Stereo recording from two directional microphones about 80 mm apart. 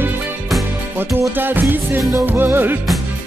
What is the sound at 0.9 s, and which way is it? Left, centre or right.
Music, right.